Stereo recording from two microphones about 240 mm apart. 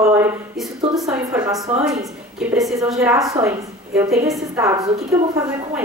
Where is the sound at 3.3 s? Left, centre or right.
Centre.